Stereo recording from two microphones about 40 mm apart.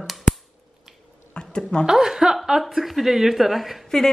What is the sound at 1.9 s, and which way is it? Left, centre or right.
A woman's voice, centre.